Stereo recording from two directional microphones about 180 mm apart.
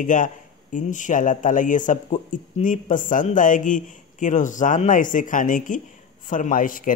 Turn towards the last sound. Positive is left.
turn(degrees=50)  # may be behind; listen again after turning